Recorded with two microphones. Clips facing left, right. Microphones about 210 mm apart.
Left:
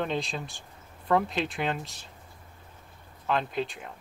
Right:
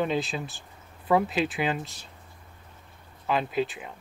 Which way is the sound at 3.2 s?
5° right (ahead or behind).